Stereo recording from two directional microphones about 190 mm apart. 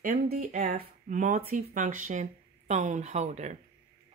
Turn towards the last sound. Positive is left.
turn(degrees=-35)  # may be behind; listen again after turning